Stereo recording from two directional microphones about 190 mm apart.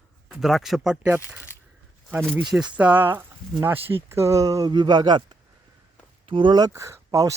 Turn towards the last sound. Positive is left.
turn(degrees=-15)  # may be behind; listen again after turning